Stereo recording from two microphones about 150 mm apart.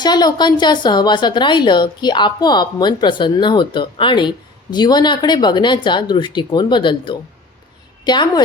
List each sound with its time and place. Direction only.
0.0 s a woman's voice: 30° left (ahead or behind)